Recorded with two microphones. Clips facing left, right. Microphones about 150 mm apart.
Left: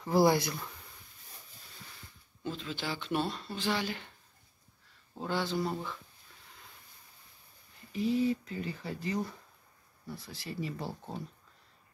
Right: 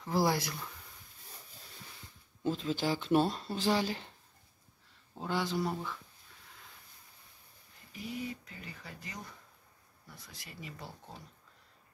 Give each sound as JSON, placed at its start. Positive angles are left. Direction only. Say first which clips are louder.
{"t": 0.0, "sound": "speech", "louder": "left 5 dB", "side_deg": 5}
{"t": 2.4, "sound": "speech", "louder": "right 5 dB", "side_deg": -40}
{"t": 5.1, "sound": "speech", "louder": "left 1 dB", "side_deg": -10}
{"t": 7.9, "sound": "speech", "louder": "left 11 dB", "side_deg": 30}